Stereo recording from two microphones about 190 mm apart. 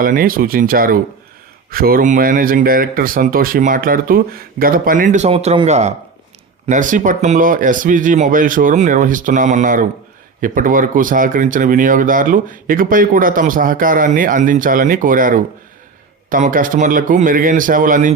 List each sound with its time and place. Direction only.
0.0 s speech: 50° right (ahead or behind)